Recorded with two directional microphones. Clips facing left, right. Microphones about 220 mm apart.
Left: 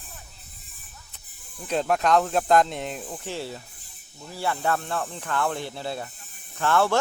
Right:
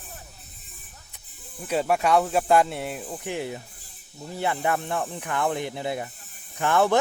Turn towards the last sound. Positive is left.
turn(degrees=-15)  # may be behind; listen again after turning